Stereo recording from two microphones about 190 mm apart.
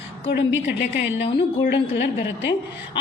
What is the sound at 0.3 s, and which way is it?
A woman's voice, 65° left (ahead or behind).